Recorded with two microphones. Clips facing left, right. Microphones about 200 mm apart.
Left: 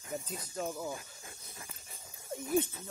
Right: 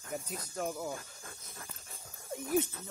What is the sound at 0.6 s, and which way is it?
Speech, 60° right (ahead or behind).